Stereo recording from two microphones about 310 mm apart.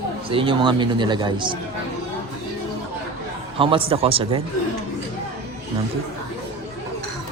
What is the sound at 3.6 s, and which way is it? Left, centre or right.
Speech, centre.